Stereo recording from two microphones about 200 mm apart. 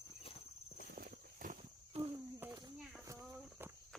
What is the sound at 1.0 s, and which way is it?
Walk, 40° right (ahead or behind).